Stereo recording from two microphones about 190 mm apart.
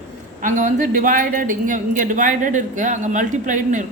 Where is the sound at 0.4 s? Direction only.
40° right (ahead or behind).